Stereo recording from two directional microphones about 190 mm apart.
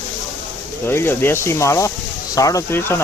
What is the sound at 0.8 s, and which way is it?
Speech, 10° left (ahead or behind).